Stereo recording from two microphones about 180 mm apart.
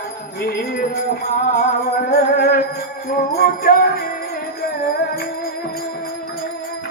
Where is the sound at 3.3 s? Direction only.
55° left (ahead or behind).